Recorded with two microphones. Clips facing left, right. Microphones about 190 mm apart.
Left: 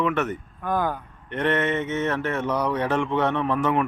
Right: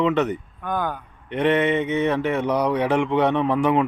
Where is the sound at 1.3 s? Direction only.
15° right (ahead or behind).